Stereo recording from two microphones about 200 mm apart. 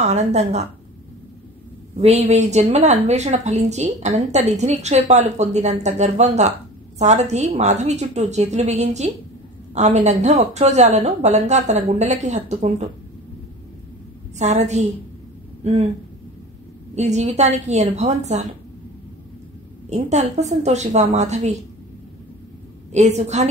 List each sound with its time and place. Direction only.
0.0 s a woman's voice: 35° right (ahead or behind)
2.0 s a woman's voice: 30° right (ahead or behind)
14.4 s a woman's voice: 35° right (ahead or behind)
16.9 s a woman's voice: 35° right (ahead or behind)
19.9 s a woman's voice: 35° right (ahead or behind)
22.9 s a woman's voice: 35° right (ahead or behind)